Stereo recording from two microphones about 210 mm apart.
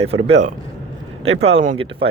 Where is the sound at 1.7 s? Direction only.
25° right (ahead or behind).